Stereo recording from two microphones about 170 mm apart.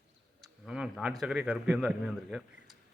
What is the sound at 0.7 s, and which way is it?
A man's voice, 5° right (ahead or behind).